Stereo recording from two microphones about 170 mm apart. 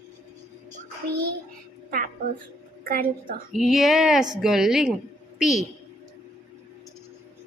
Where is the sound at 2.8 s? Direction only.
55° right (ahead or behind).